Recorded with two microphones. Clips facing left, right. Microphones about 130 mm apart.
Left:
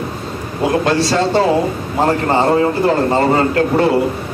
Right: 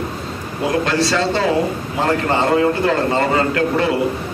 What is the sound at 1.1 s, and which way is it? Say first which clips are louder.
Speech: left 4 dB; 35° left (ahead or behind).